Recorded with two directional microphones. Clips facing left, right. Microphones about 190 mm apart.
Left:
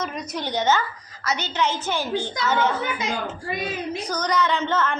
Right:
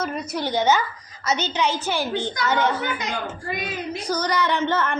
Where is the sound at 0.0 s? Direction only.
5° right (ahead or behind).